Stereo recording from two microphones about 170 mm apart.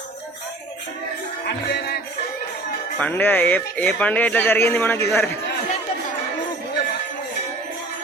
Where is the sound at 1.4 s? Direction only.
75° left (ahead or behind).